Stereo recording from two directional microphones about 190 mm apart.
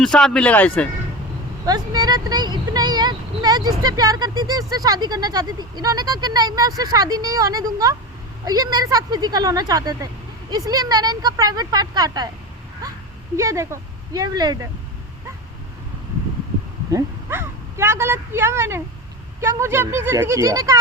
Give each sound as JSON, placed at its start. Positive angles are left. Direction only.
{"t": 0.0, "sound": "speech", "side_deg": 5}
{"t": 1.6, "sound": "speech", "side_deg": -20}
{"t": 13.3, "sound": "speech", "side_deg": -15}
{"t": 16.9, "sound": "speech", "side_deg": -15}